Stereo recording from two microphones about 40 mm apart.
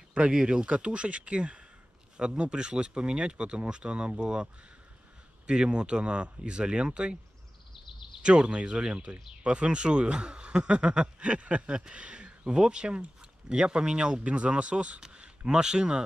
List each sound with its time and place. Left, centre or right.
0.1 s speech: right
5.5 s speech: right
8.2 s speech: right
14.2 s speech: right